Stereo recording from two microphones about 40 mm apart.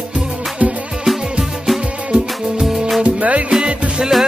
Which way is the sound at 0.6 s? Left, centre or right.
Right.